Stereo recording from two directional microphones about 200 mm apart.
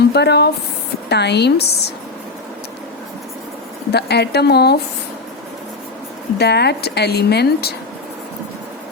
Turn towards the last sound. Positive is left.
turn(degrees=55)  # may be behind; listen again after turning